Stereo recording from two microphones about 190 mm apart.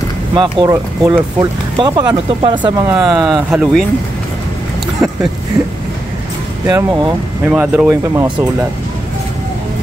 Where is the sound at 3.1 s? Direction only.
Centre (ahead or behind).